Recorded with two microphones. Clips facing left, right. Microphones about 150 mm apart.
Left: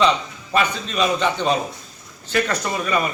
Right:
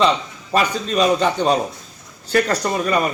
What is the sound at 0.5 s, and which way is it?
A man's voice, 35° right (ahead or behind).